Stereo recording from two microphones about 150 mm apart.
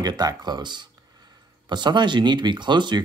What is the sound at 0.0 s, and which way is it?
Speech, 25° right (ahead or behind).